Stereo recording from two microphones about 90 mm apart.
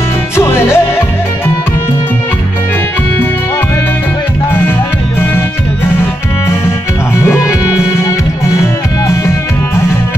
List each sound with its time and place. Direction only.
0.4 s music: 25° left (ahead or behind)
7.2 s music: 30° left (ahead or behind)
9.0 s music: 35° left (ahead or behind)